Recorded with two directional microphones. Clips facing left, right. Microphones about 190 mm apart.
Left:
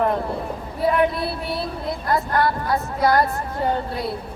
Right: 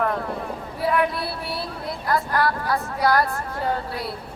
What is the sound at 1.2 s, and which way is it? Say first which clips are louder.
Speech: left 4 dB; 20° left (ahead or behind).